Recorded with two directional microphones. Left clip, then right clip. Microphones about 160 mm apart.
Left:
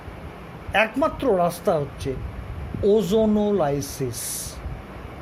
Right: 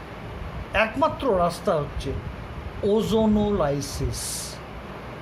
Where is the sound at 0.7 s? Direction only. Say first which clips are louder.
Left 1 dB; 35° left (ahead or behind).